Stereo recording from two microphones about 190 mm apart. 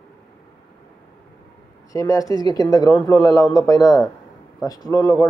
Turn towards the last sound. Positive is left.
turn(degrees=20)  # may be behind; listen again after turning